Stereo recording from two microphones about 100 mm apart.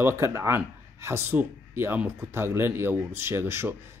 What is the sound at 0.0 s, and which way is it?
Speech, 30° right (ahead or behind).